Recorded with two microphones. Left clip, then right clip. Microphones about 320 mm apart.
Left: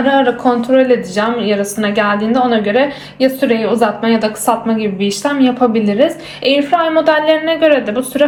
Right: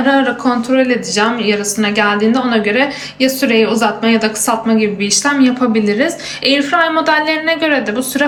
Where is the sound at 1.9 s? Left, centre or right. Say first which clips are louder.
Even; centre.